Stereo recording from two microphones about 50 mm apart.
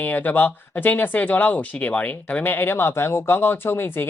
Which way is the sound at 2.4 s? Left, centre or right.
Left.